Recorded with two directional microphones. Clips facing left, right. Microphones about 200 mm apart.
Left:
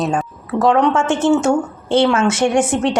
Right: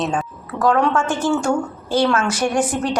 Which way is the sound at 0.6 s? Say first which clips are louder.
Left 3 dB; 20° left (ahead or behind).